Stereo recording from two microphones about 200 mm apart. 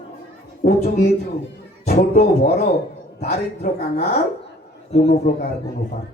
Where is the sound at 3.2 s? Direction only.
50° left (ahead or behind).